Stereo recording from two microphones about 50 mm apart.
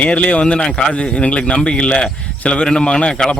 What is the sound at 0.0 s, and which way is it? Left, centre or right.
Speech, left.